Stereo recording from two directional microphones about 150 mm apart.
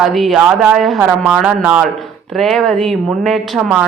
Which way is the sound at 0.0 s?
Centre (ahead or behind).